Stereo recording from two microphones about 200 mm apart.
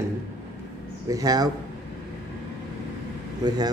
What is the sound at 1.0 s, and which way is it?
Speech, 15° right (ahead or behind).